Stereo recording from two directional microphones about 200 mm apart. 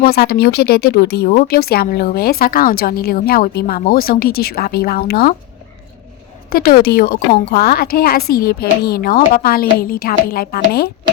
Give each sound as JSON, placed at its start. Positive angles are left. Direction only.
{"t": 0.0, "sound": "a woman's voice", "side_deg": 50}
{"t": 6.5, "sound": "a woman's voice", "side_deg": 50}